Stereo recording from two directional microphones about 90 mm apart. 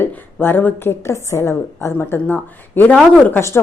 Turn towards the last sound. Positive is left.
turn(degrees=20)  # may be behind; listen again after turning